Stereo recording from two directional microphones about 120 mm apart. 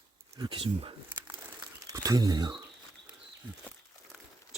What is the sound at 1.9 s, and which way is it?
Speech, 30° right (ahead or behind).